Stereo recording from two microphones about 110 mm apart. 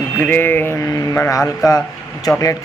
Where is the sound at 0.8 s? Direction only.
30° left (ahead or behind).